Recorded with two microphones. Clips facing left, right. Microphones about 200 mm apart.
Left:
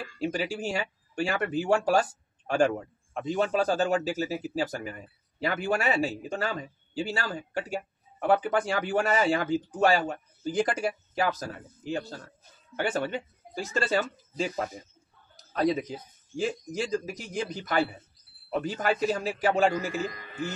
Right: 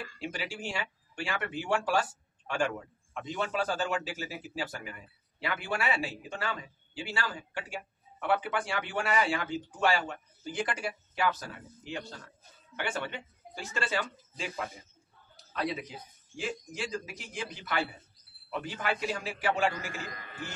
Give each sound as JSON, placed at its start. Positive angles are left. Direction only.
{"t": 0.2, "sound": "speech", "side_deg": 40}
{"t": 15.3, "sound": "a sound", "side_deg": 40}
{"t": 16.3, "sound": "speech", "side_deg": 40}